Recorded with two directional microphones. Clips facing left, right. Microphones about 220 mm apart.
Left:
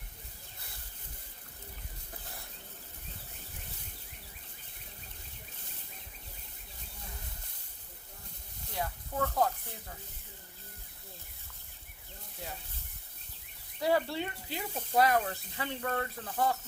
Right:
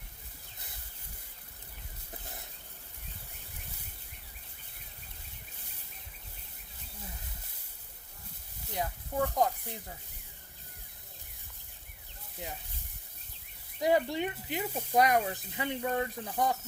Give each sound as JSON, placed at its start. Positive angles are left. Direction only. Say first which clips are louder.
{"t": 8.7, "sound": "speech", "louder": "right 2 dB", "side_deg": -15}
{"t": 13.7, "sound": "speech", "louder": "right 2 dB", "side_deg": -15}